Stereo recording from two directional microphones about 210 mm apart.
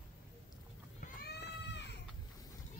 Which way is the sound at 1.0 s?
50° left (ahead or behind).